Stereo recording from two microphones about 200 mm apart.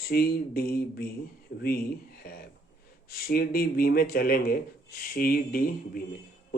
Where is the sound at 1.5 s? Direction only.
65° left (ahead or behind).